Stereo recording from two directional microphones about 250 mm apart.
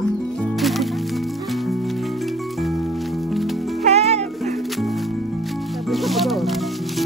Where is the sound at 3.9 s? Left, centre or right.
Right.